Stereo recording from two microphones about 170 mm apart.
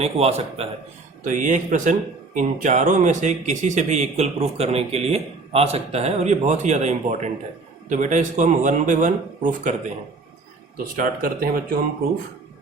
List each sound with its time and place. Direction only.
0.0 s a man's voice: 35° right (ahead or behind)
1.2 s speech: 50° right (ahead or behind)
10.9 s speech: 55° right (ahead or behind)